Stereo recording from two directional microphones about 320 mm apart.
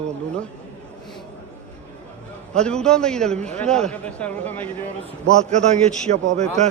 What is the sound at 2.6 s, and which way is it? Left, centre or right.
Speech, centre.